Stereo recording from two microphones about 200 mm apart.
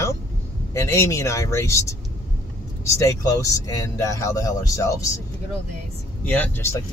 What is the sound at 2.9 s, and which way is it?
Speech, 15° left (ahead or behind).